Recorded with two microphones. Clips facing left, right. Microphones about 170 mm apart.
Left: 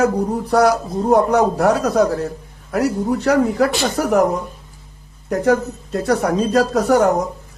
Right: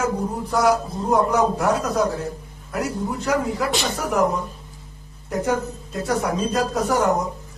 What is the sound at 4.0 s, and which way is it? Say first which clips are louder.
Speech: left 7 dB; 65° left (ahead or behind).